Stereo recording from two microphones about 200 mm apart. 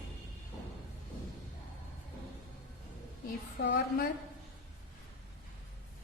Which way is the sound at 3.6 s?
60° left (ahead or behind).